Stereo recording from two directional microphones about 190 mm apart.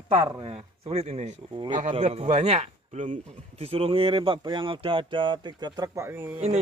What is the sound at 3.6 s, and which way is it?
Speech, 30° right (ahead or behind).